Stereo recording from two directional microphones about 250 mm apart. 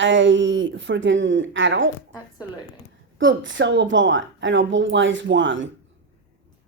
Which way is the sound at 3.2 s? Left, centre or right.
Right.